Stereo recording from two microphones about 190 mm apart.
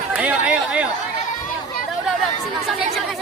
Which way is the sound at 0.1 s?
5° right (ahead or behind).